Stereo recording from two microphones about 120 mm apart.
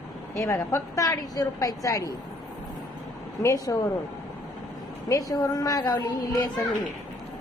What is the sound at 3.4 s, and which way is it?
Speech, 25° left (ahead or behind).